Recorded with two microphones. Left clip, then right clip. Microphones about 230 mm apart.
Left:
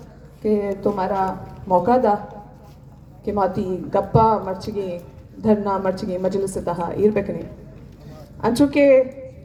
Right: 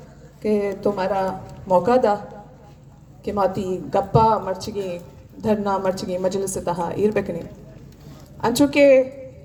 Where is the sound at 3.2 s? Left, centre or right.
Right.